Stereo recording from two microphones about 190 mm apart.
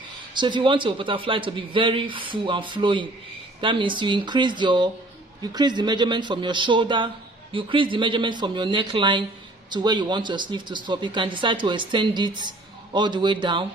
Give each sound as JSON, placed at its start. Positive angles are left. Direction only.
{"t": 0.3, "sound": "speech", "side_deg": -25}